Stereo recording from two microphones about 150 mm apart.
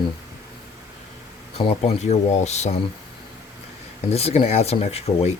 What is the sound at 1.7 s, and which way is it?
Speech, 45° left (ahead or behind).